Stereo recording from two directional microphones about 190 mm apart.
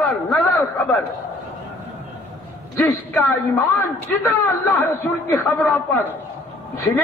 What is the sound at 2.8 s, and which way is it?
Speech, 15° left (ahead or behind).